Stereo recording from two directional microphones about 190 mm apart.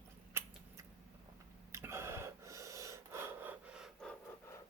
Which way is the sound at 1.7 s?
15° right (ahead or behind).